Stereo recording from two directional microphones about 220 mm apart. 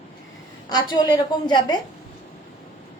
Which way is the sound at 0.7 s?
20° left (ahead or behind).